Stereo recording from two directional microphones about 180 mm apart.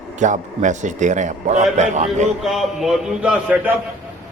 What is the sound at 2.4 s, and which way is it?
A man's voice, centre (ahead or behind).